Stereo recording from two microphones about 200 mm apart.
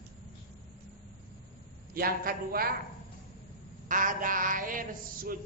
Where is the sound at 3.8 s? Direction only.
40° right (ahead or behind).